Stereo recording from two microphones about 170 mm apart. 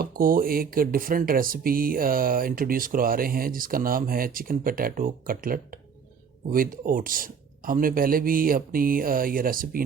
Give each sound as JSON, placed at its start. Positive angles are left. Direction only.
{"t": 0.0, "sound": "speech", "side_deg": -60}